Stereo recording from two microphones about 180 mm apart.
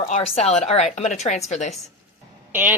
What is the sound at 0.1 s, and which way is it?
A woman's voice, 35° left (ahead or behind).